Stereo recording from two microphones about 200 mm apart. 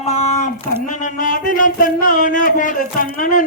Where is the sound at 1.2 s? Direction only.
40° left (ahead or behind).